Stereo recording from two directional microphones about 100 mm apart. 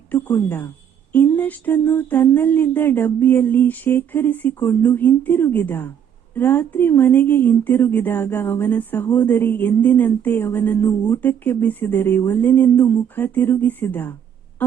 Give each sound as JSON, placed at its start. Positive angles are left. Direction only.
{"t": 0.1, "sound": "speech", "side_deg": 20}